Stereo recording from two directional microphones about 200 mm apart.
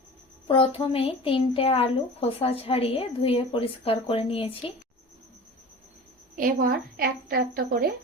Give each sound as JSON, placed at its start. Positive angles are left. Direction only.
{"t": 0.4, "sound": "a woman's voice", "side_deg": 25}
{"t": 6.3, "sound": "a woman's voice", "side_deg": -45}